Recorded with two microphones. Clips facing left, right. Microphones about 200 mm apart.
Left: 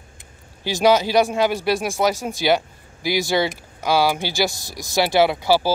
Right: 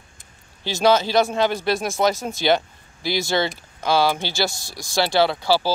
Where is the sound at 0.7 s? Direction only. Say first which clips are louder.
Left 1 dB; 15° left (ahead or behind).